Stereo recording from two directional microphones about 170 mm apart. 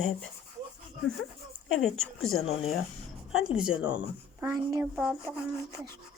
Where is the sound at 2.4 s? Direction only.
35° left (ahead or behind).